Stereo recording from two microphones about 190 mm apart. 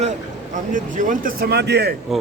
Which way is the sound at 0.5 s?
40° right (ahead or behind).